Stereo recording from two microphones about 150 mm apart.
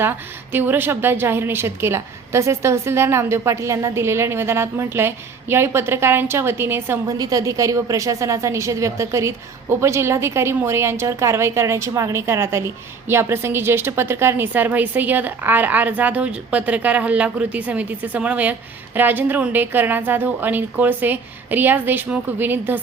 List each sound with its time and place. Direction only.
0.5 s a woman's voice: 15° right (ahead or behind)